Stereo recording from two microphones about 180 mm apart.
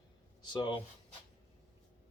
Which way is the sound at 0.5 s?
30° left (ahead or behind).